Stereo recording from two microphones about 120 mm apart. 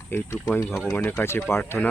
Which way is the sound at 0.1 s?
20° left (ahead or behind).